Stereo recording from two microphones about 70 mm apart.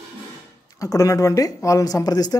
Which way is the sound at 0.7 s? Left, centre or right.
Left.